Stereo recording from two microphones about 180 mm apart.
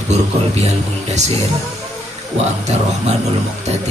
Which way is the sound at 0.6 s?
40° right (ahead or behind).